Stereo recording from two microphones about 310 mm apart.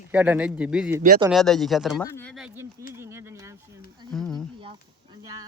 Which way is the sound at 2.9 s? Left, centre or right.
Centre.